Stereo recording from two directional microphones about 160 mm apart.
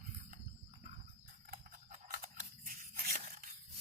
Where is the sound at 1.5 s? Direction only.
65° right (ahead or behind).